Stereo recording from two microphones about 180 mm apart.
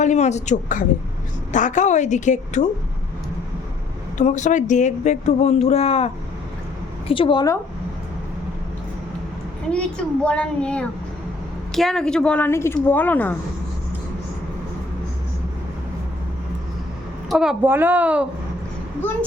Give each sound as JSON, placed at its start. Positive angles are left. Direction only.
{"t": 0.0, "sound": "speech", "side_deg": 40}
{"t": 4.2, "sound": "speech", "side_deg": 40}
{"t": 7.1, "sound": "a woman's voice", "side_deg": 25}
{"t": 10.2, "sound": "a woman's voice", "side_deg": 5}
{"t": 17.2, "sound": "a woman's voice", "side_deg": 0}
{"t": 19.0, "sound": "a woman's voice", "side_deg": 10}